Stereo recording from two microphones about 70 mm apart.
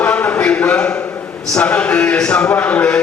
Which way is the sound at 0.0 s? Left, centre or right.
Centre.